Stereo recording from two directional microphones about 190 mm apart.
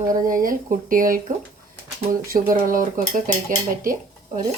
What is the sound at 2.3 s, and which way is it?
Speech, 50° right (ahead or behind).